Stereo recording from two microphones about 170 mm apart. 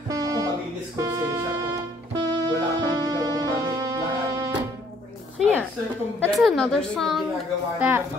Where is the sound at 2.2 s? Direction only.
25° right (ahead or behind).